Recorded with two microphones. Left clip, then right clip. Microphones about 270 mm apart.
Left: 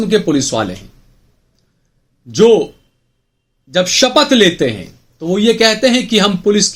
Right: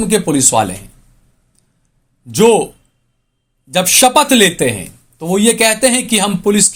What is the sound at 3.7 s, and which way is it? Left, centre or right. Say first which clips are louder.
Speech: right 1 dB; right.